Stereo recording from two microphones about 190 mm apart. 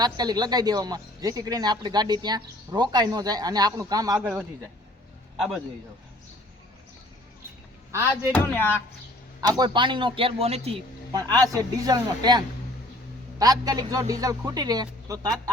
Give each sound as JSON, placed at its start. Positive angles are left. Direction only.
{"t": 0.0, "sound": "a man's voice", "side_deg": -20}
{"t": 8.3, "sound": "speech", "side_deg": 10}
{"t": 9.6, "sound": "speech", "side_deg": -25}
{"t": 11.1, "sound": "speech", "side_deg": -20}